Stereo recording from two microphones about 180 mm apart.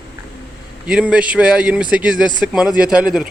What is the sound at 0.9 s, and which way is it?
Speech, 5° right (ahead or behind).